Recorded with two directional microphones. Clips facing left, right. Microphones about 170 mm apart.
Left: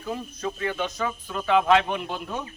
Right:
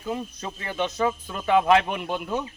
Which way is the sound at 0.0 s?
25° right (ahead or behind).